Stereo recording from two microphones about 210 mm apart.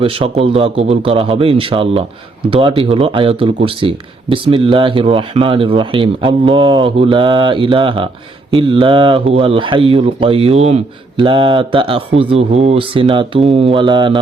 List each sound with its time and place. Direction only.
0.0 s a man's voice: 25° right (ahead or behind)